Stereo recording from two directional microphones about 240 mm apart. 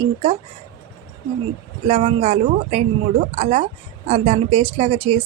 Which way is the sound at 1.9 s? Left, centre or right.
Right.